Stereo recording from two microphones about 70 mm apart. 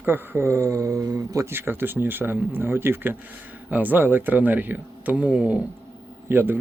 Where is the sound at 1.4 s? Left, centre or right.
Right; by 5.6 s centre.